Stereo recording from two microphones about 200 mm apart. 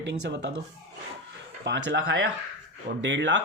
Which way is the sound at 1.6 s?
55° right (ahead or behind).